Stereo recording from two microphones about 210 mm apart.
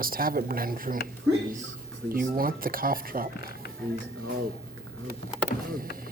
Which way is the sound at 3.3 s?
50° left (ahead or behind).